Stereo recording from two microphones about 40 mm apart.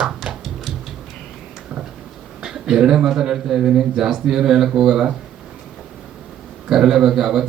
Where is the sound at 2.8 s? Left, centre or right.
Centre.